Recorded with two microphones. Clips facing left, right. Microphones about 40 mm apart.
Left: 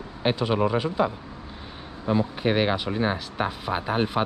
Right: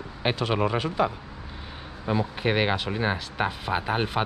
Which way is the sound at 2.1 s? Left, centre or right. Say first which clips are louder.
Left 2 dB; centre.